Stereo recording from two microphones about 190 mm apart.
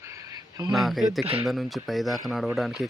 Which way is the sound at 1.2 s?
30° right (ahead or behind).